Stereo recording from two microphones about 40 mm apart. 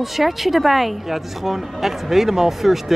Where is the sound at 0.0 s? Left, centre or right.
Centre.